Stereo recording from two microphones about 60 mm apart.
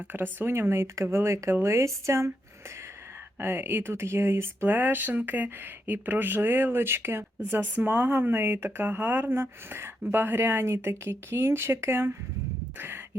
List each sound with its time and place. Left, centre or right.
0.1 s speech: right
3.3 s speech: right